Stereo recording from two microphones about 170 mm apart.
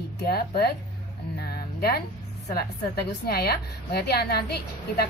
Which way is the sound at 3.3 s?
70° left (ahead or behind).